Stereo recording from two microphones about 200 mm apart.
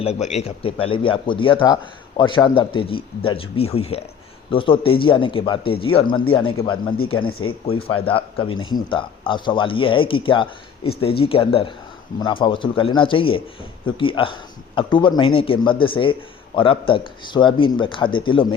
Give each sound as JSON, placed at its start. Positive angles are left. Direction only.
{"t": 0.0, "sound": "speech", "side_deg": 35}